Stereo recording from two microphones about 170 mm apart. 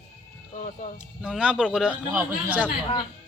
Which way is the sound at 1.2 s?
5° right (ahead or behind).